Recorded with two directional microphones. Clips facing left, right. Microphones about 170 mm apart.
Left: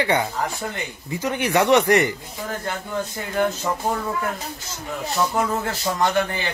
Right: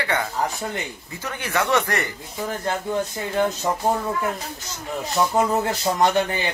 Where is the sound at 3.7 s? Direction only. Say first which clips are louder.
Right 1 dB; 20° right (ahead or behind).